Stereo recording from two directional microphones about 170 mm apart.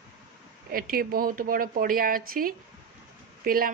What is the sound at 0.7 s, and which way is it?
Speech, 60° right (ahead or behind).